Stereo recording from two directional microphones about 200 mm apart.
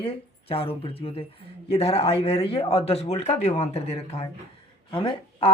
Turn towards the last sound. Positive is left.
turn(degrees=25)  # may be behind; listen again after turning